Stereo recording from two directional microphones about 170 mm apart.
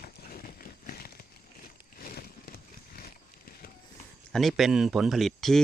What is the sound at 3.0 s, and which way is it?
Horse, 65° left (ahead or behind).